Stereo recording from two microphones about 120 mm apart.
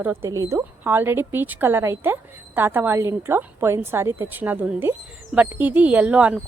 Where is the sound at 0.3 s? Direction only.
25° right (ahead or behind).